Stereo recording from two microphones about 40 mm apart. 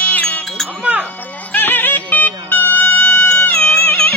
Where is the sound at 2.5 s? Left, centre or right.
Left.